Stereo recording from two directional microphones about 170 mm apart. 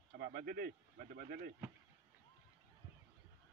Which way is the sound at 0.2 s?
65° right (ahead or behind).